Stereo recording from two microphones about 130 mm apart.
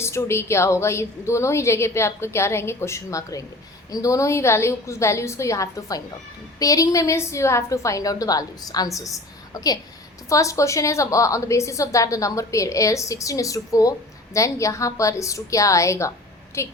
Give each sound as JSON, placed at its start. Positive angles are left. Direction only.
{"t": 0.0, "sound": "a woman's voice", "side_deg": 20}